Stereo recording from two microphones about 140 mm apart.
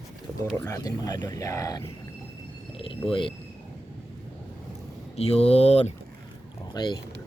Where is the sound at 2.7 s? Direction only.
40° left (ahead or behind).